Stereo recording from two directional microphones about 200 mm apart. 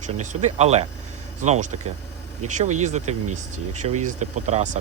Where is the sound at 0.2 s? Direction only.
35° right (ahead or behind).